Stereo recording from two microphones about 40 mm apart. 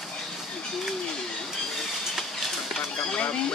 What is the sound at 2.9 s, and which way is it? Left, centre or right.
Speech, left.